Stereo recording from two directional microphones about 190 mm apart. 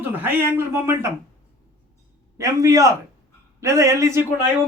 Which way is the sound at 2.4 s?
15° right (ahead or behind).